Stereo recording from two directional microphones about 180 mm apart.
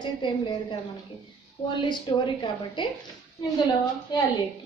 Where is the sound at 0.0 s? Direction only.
25° left (ahead or behind).